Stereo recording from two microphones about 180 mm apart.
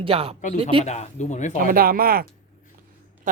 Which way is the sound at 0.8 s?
40° left (ahead or behind).